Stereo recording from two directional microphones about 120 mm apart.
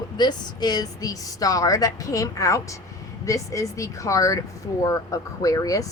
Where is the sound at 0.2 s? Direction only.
35° left (ahead or behind).